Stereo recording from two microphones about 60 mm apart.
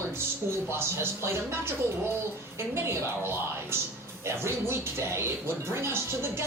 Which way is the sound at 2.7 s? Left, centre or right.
Right.